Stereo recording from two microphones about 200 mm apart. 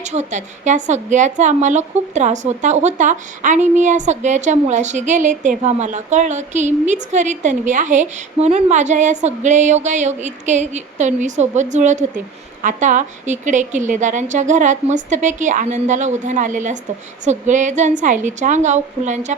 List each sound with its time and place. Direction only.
0.0 s speech: 35° right (ahead or behind)